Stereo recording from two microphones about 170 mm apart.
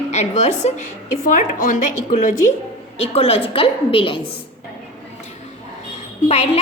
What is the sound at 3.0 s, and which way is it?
A woman's voice, 35° left (ahead or behind).